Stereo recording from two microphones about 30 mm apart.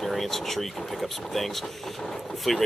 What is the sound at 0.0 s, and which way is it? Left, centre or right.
Speech, centre.